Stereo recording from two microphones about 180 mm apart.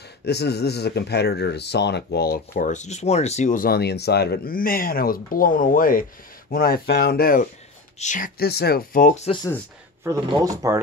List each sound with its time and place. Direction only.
0.2 s speech: 65° left (ahead or behind); by 9.3 s 45° left (ahead or behind)
10.2 s speech: 25° right (ahead or behind)